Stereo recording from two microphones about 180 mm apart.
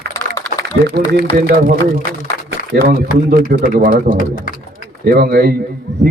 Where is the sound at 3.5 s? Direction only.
55° right (ahead or behind).